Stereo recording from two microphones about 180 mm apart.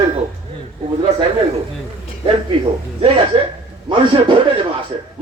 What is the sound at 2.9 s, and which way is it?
A man's voice, 30° right (ahead or behind).